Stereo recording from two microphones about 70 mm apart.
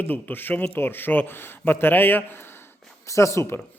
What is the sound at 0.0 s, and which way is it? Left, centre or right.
A man's voice, left.